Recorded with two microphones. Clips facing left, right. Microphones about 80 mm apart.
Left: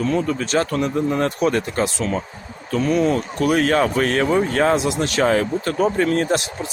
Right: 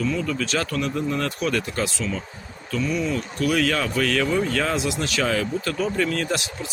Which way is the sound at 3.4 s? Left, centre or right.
Left.